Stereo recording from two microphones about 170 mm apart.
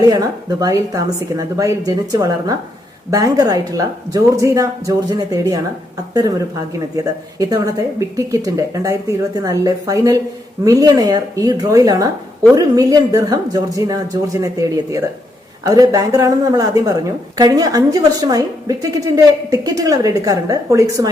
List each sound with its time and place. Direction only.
0.0 s a woman's voice: 20° right (ahead or behind)
6.7 s a woman's voice: 20° right (ahead or behind)